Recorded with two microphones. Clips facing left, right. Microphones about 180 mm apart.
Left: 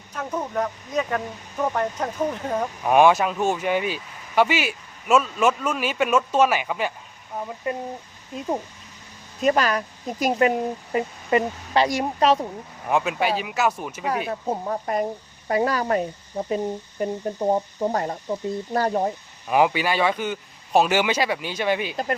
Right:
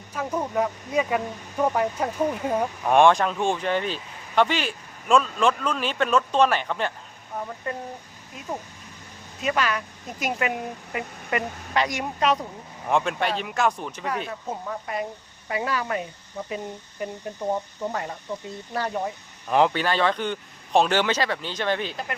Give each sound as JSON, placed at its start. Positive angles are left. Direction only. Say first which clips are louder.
{"t": 0.1, "sound": "speech", "louder": "right 1 dB", "side_deg": -10}
{"t": 2.8, "sound": "speech", "louder": "left 1 dB", "side_deg": 5}
{"t": 9.4, "sound": "speech", "louder": "left 5 dB", "side_deg": 40}
{"t": 12.9, "sound": "speech", "louder": "left 2 dB", "side_deg": 5}
{"t": 14.3, "sound": "speech", "louder": "left 6 dB", "side_deg": 30}
{"t": 19.5, "sound": "speech", "louder": "left 1 dB", "side_deg": 10}